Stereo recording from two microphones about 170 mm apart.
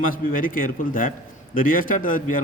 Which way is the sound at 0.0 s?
55° left (ahead or behind).